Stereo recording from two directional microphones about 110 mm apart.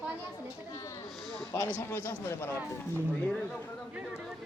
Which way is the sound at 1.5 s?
20° left (ahead or behind).